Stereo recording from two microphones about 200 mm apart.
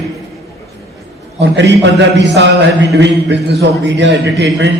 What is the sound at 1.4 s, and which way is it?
A man's voice, 60° right (ahead or behind).